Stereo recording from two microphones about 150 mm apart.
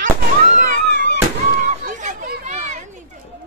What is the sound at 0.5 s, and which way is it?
Fireworks, 60° right (ahead or behind).